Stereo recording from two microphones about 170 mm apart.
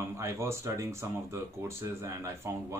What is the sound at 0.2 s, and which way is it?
Speech, 15° right (ahead or behind).